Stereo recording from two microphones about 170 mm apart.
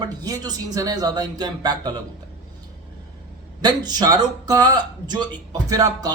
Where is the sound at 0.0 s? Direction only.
20° right (ahead or behind).